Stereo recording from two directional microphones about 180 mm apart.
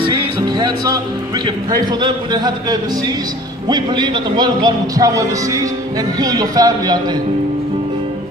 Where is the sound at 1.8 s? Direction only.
25° right (ahead or behind).